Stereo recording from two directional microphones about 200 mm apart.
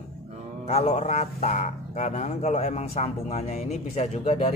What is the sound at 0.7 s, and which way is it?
Speech, 35° left (ahead or behind).